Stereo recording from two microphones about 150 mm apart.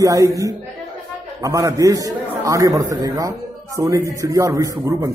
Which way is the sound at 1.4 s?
20° right (ahead or behind).